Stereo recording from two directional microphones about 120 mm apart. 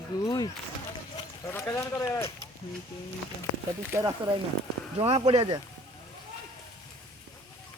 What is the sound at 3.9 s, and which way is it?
Speech, 20° right (ahead or behind).